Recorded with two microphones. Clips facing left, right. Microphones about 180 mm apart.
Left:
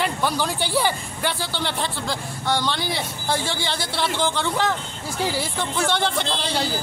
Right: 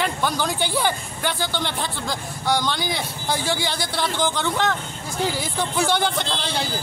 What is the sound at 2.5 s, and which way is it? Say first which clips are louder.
Speech: right 1 dB; centre (ahead or behind).